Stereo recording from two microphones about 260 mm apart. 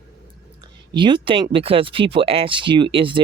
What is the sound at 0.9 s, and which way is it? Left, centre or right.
Speech, centre.